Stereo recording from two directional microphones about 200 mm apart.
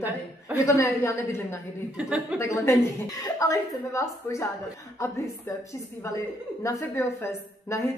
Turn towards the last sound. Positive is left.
turn(degrees=15)  # may be behind; listen again after turning